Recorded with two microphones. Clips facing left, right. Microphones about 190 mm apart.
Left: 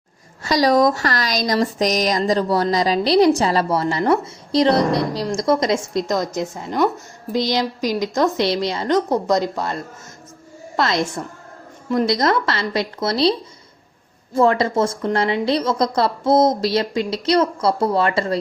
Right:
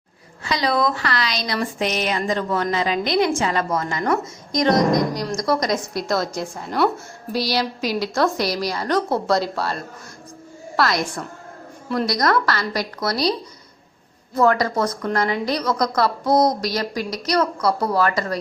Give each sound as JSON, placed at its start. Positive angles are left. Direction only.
{"t": 0.4, "sound": "a woman's voice", "side_deg": 40}
{"t": 14.3, "sound": "a woman's voice", "side_deg": 25}